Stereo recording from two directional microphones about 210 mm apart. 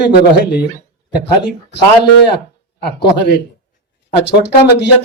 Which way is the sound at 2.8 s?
50° left (ahead or behind).